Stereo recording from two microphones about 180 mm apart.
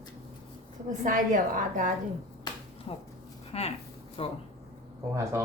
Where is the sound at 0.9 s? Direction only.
45° right (ahead or behind).